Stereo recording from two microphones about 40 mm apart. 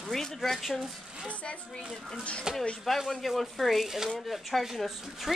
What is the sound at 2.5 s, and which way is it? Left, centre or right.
Speech, centre.